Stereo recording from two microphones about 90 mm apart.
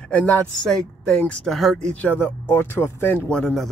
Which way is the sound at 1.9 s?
20° left (ahead or behind).